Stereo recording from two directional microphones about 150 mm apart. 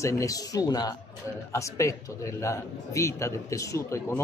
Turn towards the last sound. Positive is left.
turn(degrees=20)  # may be behind; listen again after turning